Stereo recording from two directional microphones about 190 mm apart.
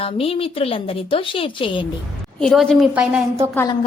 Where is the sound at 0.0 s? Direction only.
30° left (ahead or behind).